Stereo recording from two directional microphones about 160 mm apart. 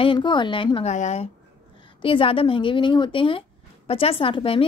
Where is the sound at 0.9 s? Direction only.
45° left (ahead or behind).